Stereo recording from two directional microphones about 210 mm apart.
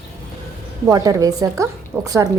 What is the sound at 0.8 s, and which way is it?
A woman's voice, 15° right (ahead or behind).